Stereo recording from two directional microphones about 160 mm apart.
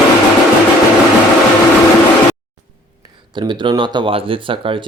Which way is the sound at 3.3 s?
30° right (ahead or behind).